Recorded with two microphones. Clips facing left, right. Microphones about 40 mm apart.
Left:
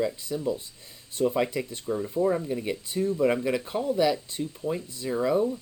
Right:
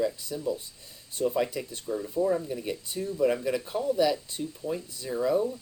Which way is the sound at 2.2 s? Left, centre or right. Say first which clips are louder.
Left 2 dB; left.